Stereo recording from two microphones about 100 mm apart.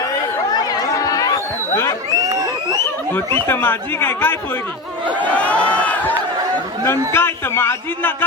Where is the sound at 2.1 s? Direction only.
40° right (ahead or behind).